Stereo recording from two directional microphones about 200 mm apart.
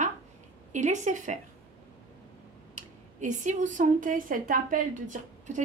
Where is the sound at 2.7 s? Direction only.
40° right (ahead or behind).